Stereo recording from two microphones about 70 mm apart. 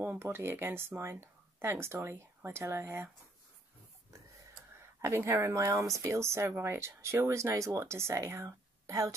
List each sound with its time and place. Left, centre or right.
0.0 s speech: right
5.0 s speech: right